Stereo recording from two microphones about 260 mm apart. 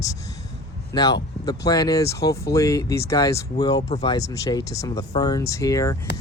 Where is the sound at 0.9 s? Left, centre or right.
Centre.